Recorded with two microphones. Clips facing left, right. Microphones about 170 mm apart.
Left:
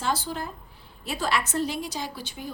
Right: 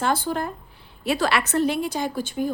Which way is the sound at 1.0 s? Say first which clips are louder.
Right 5 dB; 70° right (ahead or behind).